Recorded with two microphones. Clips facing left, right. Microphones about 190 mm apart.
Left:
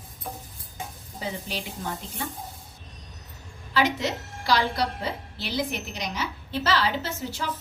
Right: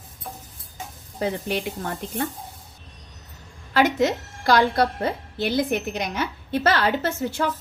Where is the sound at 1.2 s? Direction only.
60° right (ahead or behind).